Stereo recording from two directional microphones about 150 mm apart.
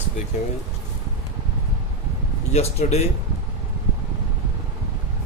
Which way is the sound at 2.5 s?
45° left (ahead or behind).